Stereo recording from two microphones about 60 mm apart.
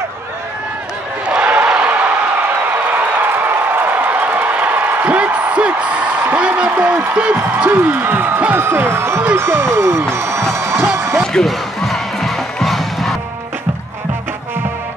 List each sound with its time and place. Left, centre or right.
1.2 s a sound: right
7.5 s speech: right
11.0 s slam: right
11.3 s music: centre